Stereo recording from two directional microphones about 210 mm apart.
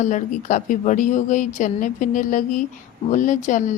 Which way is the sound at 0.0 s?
35° left (ahead or behind).